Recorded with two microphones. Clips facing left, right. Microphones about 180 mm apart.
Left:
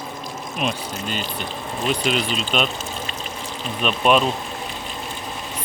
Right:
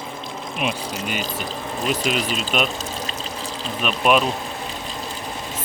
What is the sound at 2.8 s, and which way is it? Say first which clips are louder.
Water: right 1 dB; 40° right (ahead or behind).